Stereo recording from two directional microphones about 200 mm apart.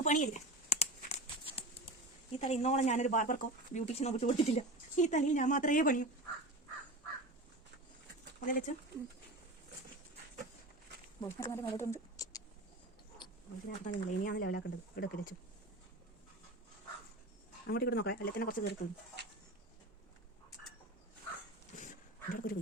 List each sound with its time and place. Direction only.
0.0 s a sound: 35° left (ahead or behind)
2.4 s speech: 35° left (ahead or behind)
8.4 s speech: 45° left (ahead or behind)
11.2 s speech: 15° left (ahead or behind)
13.7 s speech: 40° left (ahead or behind)
17.7 s speech: 50° left (ahead or behind)
21.8 s dog: 40° left (ahead or behind)